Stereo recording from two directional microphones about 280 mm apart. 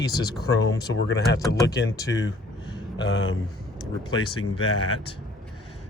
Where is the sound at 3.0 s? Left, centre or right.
Left.